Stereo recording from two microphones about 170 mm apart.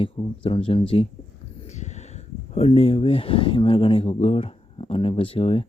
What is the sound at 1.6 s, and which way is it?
Speech, 40° left (ahead or behind).